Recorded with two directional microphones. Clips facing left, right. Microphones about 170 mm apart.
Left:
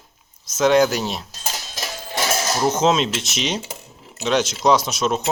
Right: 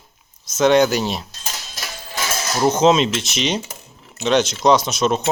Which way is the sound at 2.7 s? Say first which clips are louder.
Right 5 dB; 5° left (ahead or behind).